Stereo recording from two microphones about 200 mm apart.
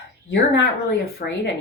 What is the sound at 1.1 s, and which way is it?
Speech, 60° left (ahead or behind).